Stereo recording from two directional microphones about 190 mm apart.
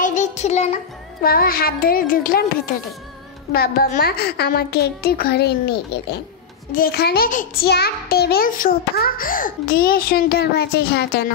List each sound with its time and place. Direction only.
0.0 s child singing: 40° left (ahead or behind)
1.2 s a child's voice: 50° left (ahead or behind)